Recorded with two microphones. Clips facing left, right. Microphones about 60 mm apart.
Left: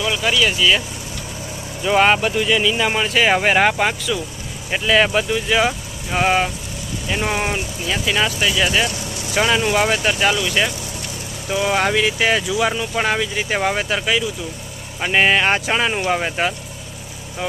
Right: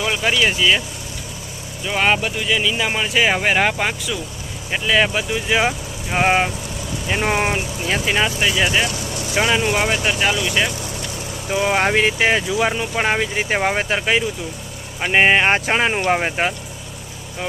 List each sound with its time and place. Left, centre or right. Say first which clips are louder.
0.0 s speech: even; right
1.8 s speech: left 4 dB; centre
5.5 s speech: left 1 dB; centre
11.4 s speech: even; centre
11.9 s speech: right 1 dB; right
12.3 s speech: even; right
15.0 s speech: right 1 dB; centre